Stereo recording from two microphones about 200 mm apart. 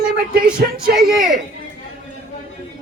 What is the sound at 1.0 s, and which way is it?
Speech, centre (ahead or behind).